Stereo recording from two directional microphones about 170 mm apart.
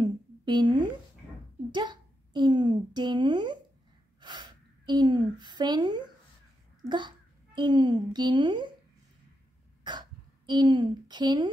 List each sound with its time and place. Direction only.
0.0 s a sound: 25° right (ahead or behind)
6.9 s a child's voice: 25° right (ahead or behind)
9.8 s speech: 25° right (ahead or behind)